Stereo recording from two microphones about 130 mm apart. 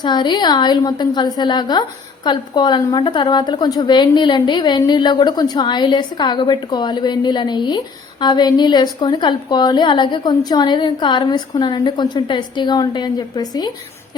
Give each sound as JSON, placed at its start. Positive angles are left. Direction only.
{"t": 0.0, "sound": "a woman's voice", "side_deg": 35}